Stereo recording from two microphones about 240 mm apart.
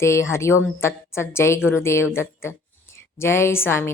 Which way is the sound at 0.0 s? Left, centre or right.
Centre.